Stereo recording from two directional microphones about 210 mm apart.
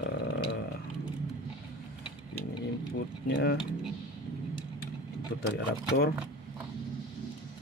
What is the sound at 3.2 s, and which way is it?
Speech, 55° left (ahead or behind).